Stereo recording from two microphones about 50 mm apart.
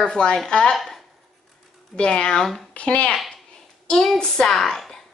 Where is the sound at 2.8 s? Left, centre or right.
Left.